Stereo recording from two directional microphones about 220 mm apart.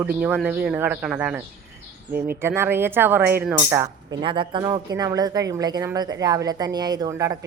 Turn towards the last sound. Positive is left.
turn(degrees=-15)  # may be behind; listen again after turning